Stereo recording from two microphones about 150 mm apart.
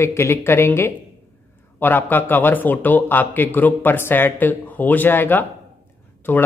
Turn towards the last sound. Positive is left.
turn(degrees=10)  # may be behind; listen again after turning